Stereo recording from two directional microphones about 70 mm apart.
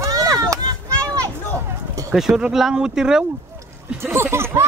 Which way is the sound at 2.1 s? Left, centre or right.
Centre.